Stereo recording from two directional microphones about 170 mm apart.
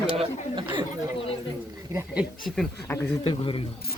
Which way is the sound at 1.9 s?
15° right (ahead or behind).